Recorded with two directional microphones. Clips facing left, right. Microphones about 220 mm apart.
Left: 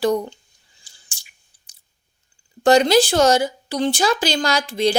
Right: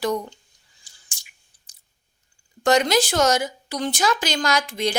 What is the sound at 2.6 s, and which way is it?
A woman's voice, 30° left (ahead or behind).